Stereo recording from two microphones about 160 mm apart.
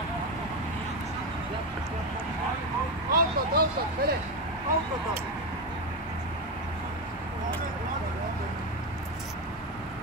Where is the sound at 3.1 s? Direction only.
70° right (ahead or behind).